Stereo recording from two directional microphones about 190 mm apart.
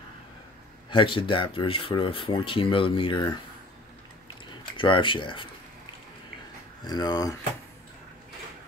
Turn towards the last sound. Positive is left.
turn(degrees=20)  # may be behind; listen again after turning